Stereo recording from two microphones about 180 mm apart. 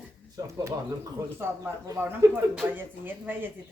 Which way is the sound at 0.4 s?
20° right (ahead or behind).